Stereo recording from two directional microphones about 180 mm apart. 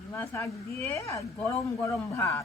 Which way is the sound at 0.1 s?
15° left (ahead or behind).